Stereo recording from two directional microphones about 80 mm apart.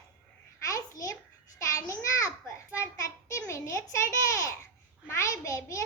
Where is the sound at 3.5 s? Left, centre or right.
Left.